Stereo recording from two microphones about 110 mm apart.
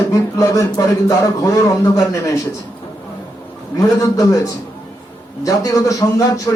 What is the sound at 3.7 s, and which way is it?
Speech, 30° left (ahead or behind).